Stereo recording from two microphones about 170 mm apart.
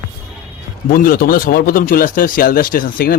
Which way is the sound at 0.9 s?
60° left (ahead or behind).